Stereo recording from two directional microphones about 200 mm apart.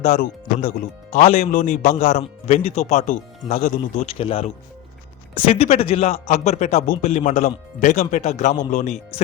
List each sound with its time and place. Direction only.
0.0 s speech: 45° left (ahead or behind)